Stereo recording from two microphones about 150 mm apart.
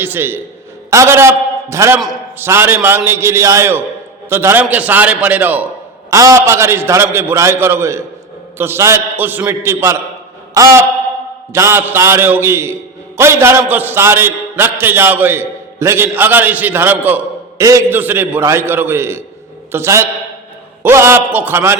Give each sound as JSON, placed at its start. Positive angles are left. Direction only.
{"t": 0.0, "sound": "a man's voice", "side_deg": -15}
{"t": 1.7, "sound": "a sound", "side_deg": -20}
{"t": 2.4, "sound": "a man's voice", "side_deg": -15}
{"t": 6.1, "sound": "a man's voice", "side_deg": -20}
{"t": 10.5, "sound": "a sound", "side_deg": -20}
{"t": 11.5, "sound": "a man's voice", "side_deg": -15}